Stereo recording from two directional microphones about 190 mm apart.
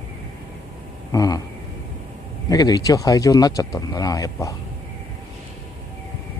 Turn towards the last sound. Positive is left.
turn(degrees=20)  # may be behind; listen again after turning